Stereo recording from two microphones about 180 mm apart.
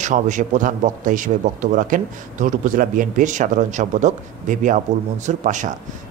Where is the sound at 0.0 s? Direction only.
45° right (ahead or behind).